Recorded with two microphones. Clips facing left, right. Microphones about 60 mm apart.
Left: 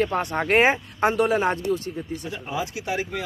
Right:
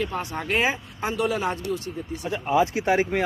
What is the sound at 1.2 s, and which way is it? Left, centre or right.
Speech, left.